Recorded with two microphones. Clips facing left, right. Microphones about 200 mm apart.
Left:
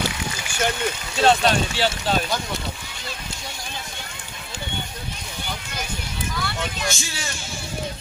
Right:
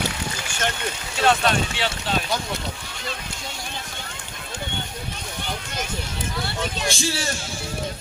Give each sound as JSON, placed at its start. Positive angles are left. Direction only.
{"t": 1.2, "sound": "speech", "side_deg": 35}
{"t": 6.3, "sound": "speech", "side_deg": -30}